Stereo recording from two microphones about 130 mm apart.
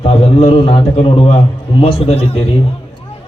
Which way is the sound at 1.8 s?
55° left (ahead or behind).